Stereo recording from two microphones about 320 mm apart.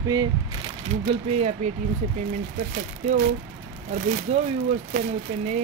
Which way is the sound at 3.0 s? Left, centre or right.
Centre.